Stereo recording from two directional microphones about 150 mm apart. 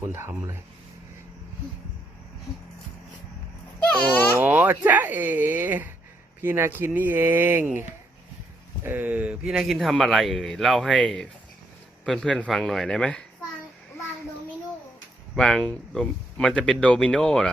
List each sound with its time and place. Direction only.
0.1 s speech: 15° right (ahead or behind)
3.8 s a sound: 10° left (ahead or behind)
4.4 s a man's voice: 15° right (ahead or behind); by 13.2 s 5° left (ahead or behind)
15.4 s a man's voice: 5° left (ahead or behind)